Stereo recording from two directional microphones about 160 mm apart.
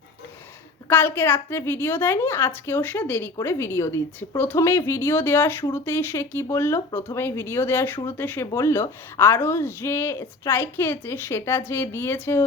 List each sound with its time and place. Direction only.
0.9 s speech: 10° left (ahead or behind)